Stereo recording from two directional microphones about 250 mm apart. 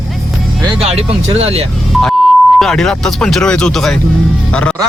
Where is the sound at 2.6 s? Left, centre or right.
Centre.